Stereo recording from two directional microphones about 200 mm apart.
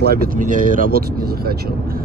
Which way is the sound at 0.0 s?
45° right (ahead or behind).